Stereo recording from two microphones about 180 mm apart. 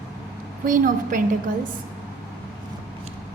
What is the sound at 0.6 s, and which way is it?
Speech, 50° right (ahead or behind).